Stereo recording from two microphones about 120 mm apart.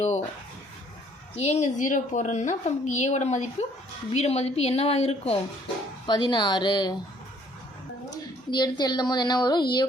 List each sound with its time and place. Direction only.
1.4 s a woman's voice: 65° left (ahead or behind)
6.1 s speech: 40° left (ahead or behind)
8.4 s speech: 35° left (ahead or behind)